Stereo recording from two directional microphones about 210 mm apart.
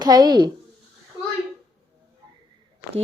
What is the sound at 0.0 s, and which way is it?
Speech, 20° right (ahead or behind).